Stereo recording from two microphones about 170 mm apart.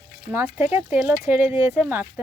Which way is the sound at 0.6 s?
10° right (ahead or behind).